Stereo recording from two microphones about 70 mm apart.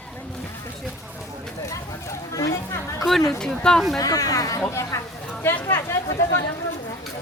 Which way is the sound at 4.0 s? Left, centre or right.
Left.